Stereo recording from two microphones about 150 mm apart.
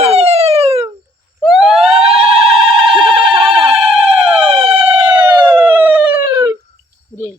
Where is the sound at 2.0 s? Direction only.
40° right (ahead or behind).